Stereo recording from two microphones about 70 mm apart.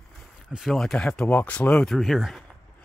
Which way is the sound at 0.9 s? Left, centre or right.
Centre.